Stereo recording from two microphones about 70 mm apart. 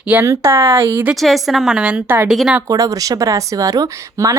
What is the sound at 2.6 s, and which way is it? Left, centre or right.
Speech, right.